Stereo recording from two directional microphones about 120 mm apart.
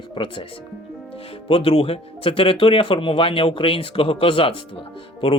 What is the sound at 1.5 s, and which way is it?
Speech, 55° left (ahead or behind).